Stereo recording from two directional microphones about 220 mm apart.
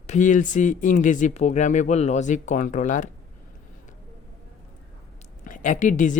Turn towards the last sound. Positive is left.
turn(degrees=35)  # may be behind; listen again after turning